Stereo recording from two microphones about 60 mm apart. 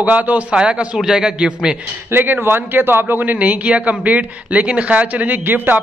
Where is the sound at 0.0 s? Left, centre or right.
Right.